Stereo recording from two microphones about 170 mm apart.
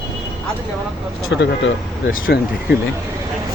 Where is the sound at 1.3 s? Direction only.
90° left.